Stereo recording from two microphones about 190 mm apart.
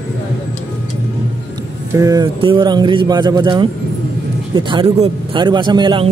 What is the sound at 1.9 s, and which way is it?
A man's voice, 15° right (ahead or behind).